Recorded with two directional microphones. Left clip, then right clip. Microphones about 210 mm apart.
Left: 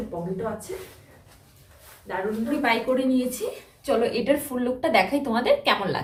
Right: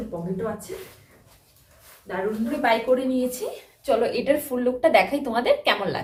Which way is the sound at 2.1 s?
5° left (ahead or behind).